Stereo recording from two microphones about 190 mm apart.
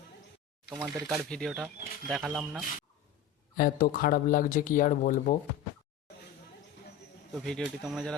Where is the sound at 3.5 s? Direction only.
50° left (ahead or behind).